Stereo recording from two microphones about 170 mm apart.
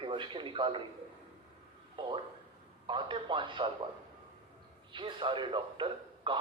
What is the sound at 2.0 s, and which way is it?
Speech, 25° right (ahead or behind).